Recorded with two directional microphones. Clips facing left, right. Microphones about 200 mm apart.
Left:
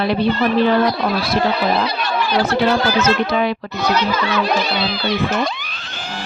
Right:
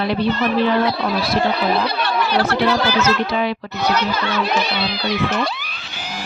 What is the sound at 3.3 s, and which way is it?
Speech, 55° left (ahead or behind).